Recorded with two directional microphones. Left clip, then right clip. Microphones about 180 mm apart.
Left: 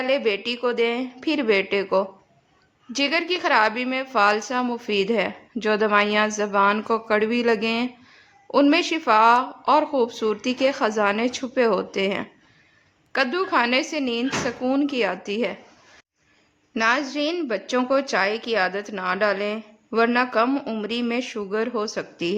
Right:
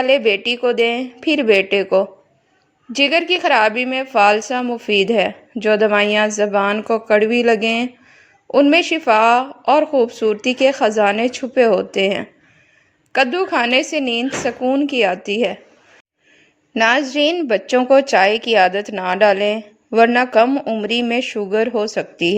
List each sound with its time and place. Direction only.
0.0 s a woman's voice: 20° right (ahead or behind)
16.7 s a woman's voice: 30° right (ahead or behind)